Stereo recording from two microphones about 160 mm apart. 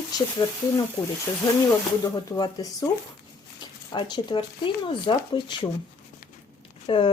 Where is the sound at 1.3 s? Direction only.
15° left (ahead or behind).